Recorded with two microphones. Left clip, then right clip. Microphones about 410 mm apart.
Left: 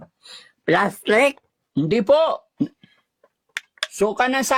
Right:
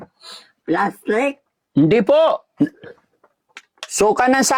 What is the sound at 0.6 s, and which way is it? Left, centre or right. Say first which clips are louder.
Speech: left 1 dB; left.